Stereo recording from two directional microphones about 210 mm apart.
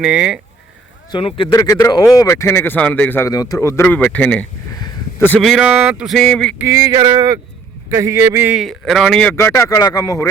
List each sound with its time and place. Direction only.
0.0 s a man's voice: 5° right (ahead or behind)
1.1 s speech: 25° left (ahead or behind); by 4.4 s 5° left (ahead or behind)
4.8 s a sound: 10° left (ahead or behind)
5.4 s a man's voice: centre (ahead or behind)
6.6 s a man's voice: 15° right (ahead or behind); by 10.2 s 15° left (ahead or behind)